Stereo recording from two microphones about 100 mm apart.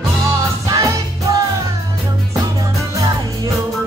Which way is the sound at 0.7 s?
35° right (ahead or behind).